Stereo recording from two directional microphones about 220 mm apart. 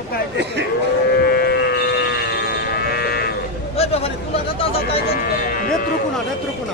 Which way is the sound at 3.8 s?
25° left (ahead or behind).